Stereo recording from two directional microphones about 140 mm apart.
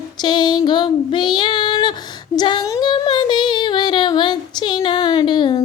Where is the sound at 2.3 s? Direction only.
30° left (ahead or behind).